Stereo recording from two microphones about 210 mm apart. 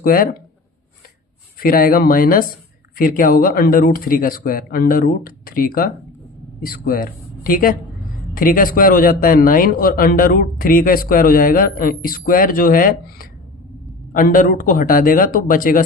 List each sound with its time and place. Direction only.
0.0 s speech: 45° left (ahead or behind)
1.5 s a man's voice: 45° left (ahead or behind)